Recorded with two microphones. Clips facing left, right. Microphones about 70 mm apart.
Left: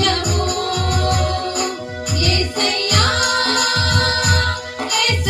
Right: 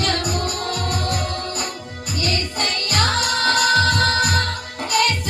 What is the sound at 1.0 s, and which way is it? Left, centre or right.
Music, left.